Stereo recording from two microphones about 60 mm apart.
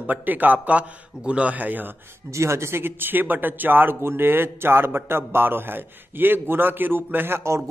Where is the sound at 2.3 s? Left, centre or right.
Right.